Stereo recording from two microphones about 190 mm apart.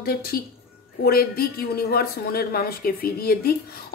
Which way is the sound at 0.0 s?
55° left (ahead or behind).